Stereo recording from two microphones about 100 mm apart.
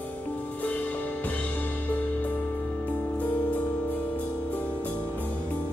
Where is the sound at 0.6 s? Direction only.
15° left (ahead or behind).